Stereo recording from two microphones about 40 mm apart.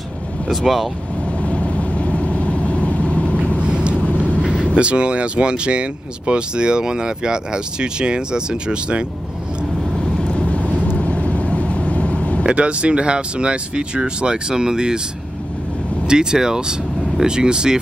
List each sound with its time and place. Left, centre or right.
0.5 s speech: centre
1.4 s vehicle: left
3.5 s vehicle: right
4.7 s speech: right
9.9 s vehicle: centre
12.4 s speech: right
16.1 s speech: centre